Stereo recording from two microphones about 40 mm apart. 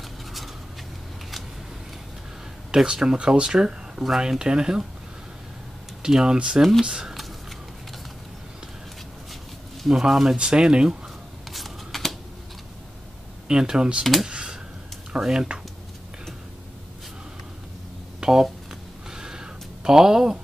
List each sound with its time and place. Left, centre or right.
2.7 s speech: centre
6.0 s speech: centre
9.8 s speech: centre
11.5 s a sound: centre
13.5 s speech: centre
14.2 s a sound: right
15.1 s speech: centre
18.2 s speech: centre
19.0 s a sound: centre